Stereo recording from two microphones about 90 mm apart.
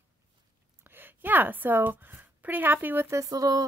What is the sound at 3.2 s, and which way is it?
Speech, 40° right (ahead or behind).